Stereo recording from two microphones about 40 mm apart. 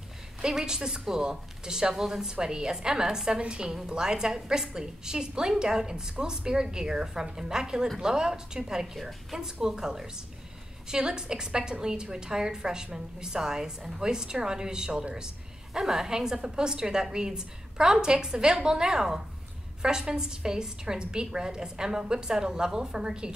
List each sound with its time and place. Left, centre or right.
0.4 s a woman's voice: centre